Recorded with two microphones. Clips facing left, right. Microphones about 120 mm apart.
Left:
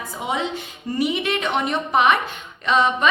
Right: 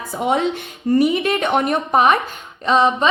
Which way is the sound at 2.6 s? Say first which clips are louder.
Right 3 dB; 35° right (ahead or behind).